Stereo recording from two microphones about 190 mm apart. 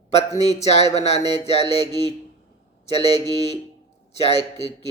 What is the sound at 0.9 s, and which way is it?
Mantra, 35° left (ahead or behind).